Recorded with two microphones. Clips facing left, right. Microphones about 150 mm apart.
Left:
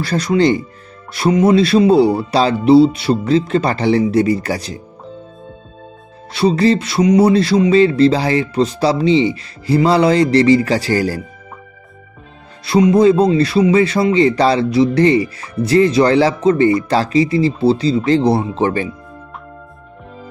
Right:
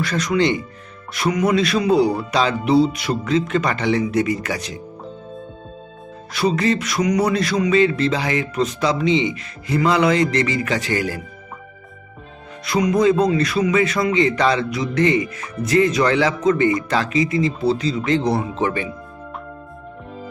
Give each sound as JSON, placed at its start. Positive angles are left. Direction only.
{"t": 0.0, "sound": "speech", "side_deg": 30}
{"t": 6.3, "sound": "speech", "side_deg": 30}
{"t": 12.6, "sound": "speech", "side_deg": 30}